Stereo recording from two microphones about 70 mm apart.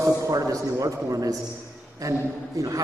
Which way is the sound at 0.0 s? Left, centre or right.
Right.